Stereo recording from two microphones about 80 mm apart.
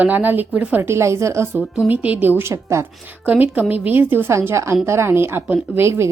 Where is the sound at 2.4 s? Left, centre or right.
Right.